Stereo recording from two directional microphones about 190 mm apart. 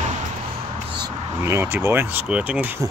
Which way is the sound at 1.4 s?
15° right (ahead or behind).